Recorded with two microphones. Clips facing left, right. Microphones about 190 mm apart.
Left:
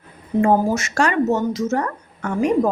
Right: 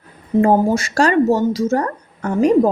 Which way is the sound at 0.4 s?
35° right (ahead or behind).